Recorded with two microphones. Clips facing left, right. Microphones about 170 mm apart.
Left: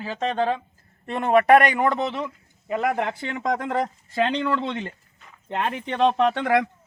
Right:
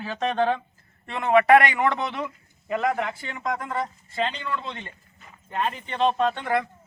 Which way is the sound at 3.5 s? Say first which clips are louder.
Left 4 dB; 85° left.